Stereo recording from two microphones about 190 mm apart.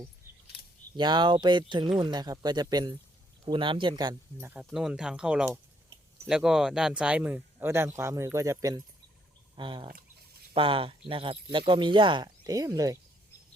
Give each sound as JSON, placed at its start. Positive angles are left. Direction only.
{"t": 0.3, "sound": "scissors", "side_deg": -10}
{"t": 0.9, "sound": "speech", "side_deg": -25}